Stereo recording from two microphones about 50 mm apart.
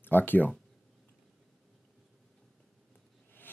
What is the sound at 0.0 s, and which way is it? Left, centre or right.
Speech, left.